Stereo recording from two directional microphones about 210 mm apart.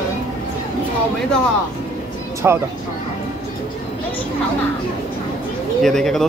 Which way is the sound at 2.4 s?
10° right (ahead or behind).